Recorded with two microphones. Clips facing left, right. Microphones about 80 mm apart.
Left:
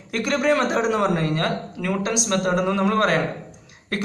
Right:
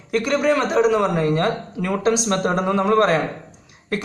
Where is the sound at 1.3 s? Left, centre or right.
Right.